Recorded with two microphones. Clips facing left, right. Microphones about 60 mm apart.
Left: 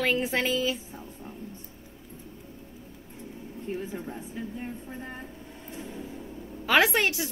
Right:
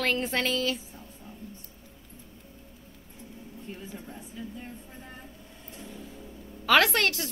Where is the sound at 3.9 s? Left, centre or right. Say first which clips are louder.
Left 6 dB; left.